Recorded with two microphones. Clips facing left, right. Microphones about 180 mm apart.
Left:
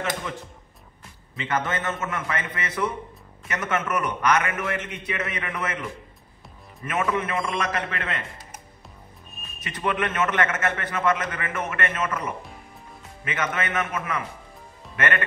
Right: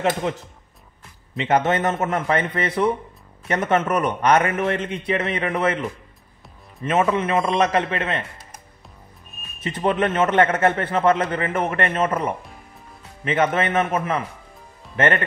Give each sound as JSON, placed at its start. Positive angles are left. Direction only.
{"t": 1.8, "sound": "a man's voice", "side_deg": -35}
{"t": 9.6, "sound": "a man's voice", "side_deg": -25}